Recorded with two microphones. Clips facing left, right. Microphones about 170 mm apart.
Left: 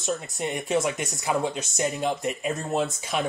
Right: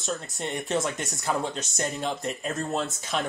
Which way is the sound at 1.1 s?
Centre (ahead or behind).